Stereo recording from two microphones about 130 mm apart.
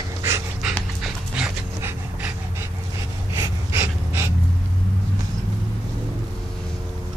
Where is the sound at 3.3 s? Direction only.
20° right (ahead or behind).